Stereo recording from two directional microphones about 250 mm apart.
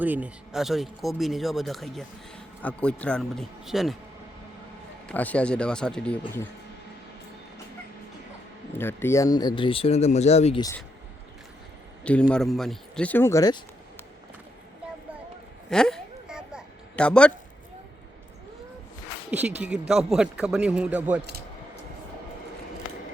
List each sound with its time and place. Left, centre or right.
0.0 s speech: centre
5.0 s speech: centre
8.7 s speech: centre
12.0 s speech: centre
15.7 s a sound: centre
19.3 s speech: centre